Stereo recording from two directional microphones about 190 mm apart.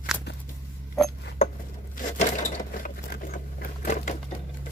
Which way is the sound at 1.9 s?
45° left (ahead or behind).